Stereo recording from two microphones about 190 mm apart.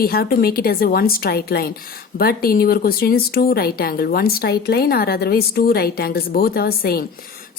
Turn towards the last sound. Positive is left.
turn(degrees=55)  # may be behind; listen again after turning